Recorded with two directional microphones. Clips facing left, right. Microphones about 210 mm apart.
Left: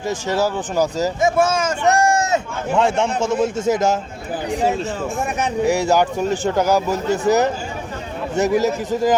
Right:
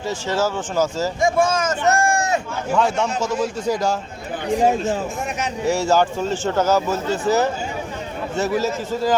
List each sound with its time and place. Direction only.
0.1 s speech: 15° left (ahead or behind)
5.6 s speech: 15° left (ahead or behind)